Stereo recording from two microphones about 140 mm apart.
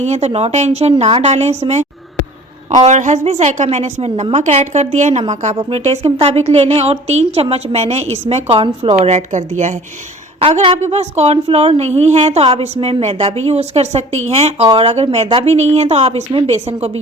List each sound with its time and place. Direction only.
0.0 s a woman's voice: 50° right (ahead or behind)
9.0 s a woman's voice: 50° right (ahead or behind)
10.4 s a woman's voice: 45° right (ahead or behind)